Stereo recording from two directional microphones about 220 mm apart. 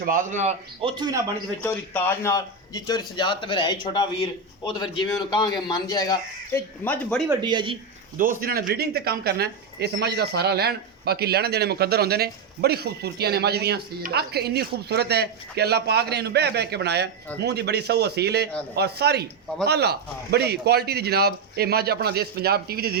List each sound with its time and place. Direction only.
0.0 s a man's voice: 40° right (ahead or behind); by 1.2 s 20° right (ahead or behind)
1.6 s a man's voice: 10° left (ahead or behind)
7.3 s speech: 20° right (ahead or behind)
8.2 s speech: 40° right (ahead or behind)